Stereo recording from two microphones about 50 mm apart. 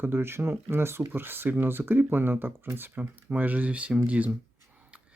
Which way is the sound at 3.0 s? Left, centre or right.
Right.